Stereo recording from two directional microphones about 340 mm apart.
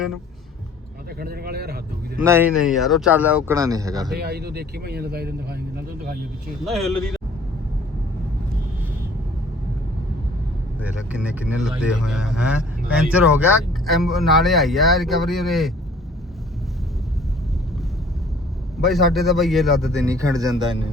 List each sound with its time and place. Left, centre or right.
1.2 s speech: right
2.2 s speech: centre
4.2 s speech: right
6.7 s speech: centre
10.8 s speech: centre
18.8 s speech: centre